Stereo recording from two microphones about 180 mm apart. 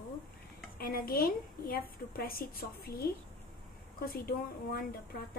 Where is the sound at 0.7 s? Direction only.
55° left (ahead or behind).